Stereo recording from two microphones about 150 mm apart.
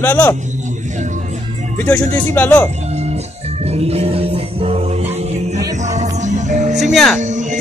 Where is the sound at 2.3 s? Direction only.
10° left (ahead or behind).